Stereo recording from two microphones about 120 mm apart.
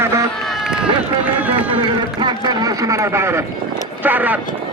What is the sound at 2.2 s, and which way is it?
A man's voice, 35° right (ahead or behind).